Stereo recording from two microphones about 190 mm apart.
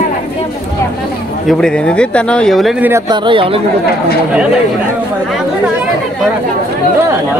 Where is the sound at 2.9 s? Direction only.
25° right (ahead or behind).